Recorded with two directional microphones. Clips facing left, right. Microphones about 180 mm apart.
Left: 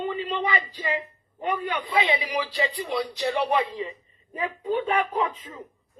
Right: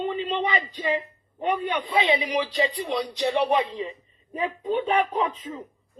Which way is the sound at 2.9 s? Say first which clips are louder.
Right 2 dB; 20° right (ahead or behind).